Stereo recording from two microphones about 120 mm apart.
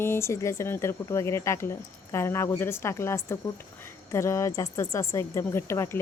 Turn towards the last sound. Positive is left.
turn(degrees=20)  # may be behind; listen again after turning